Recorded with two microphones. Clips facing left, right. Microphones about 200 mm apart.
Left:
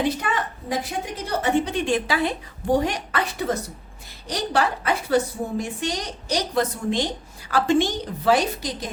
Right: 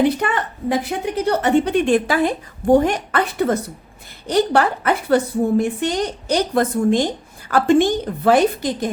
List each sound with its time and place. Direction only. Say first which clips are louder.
0.2 s a woman's voice: right 5 dB; 60° right (ahead or behind)